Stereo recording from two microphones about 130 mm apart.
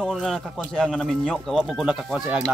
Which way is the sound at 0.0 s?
5° left (ahead or behind).